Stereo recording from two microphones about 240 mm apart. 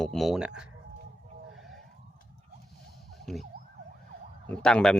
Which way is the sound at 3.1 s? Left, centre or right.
Centre.